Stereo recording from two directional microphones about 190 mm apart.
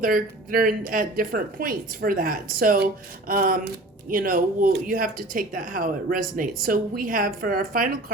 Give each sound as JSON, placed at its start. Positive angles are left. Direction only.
{"t": 0.0, "sound": "speech", "side_deg": -50}